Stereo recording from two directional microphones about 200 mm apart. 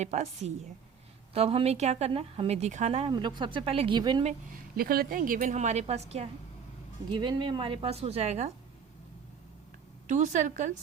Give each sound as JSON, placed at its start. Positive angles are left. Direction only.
{"t": 0.0, "sound": "a woman's voice", "side_deg": -35}
{"t": 4.8, "sound": "a woman's voice", "side_deg": -50}
{"t": 10.1, "sound": "speech", "side_deg": -35}